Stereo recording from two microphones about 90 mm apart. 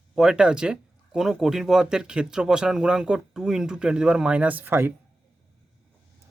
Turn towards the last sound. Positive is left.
turn(degrees=-25)  # may be behind; listen again after turning